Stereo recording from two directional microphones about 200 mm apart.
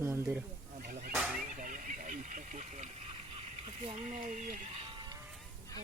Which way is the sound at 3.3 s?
30° right (ahead or behind).